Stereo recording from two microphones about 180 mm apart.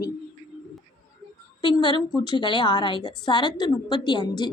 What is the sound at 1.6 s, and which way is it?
A woman's voice, 25° left (ahead or behind).